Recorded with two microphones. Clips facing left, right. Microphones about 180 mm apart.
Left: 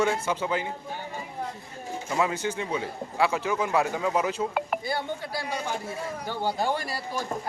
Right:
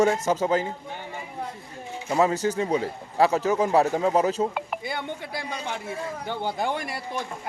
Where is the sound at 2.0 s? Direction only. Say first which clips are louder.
Right 5 dB; 40° right (ahead or behind).